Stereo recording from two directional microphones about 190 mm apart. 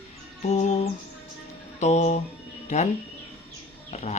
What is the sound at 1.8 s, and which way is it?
Speech, 35° left (ahead or behind).